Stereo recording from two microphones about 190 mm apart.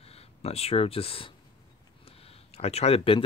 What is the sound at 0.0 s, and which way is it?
Speech, 30° left (ahead or behind).